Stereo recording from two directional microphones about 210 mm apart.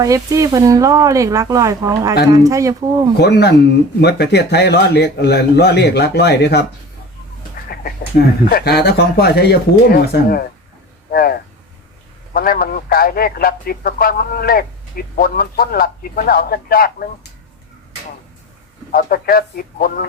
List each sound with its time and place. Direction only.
0.0 s speech: 15° right (ahead or behind)
3.2 s a man's voice: 50° left (ahead or behind)
7.7 s a man's voice: 45° left (ahead or behind)
18.9 s a man's voice: 45° left (ahead or behind)